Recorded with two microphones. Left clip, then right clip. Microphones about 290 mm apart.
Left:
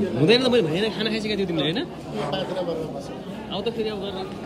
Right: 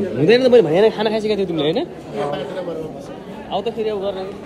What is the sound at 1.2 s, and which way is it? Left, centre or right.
Speech, centre.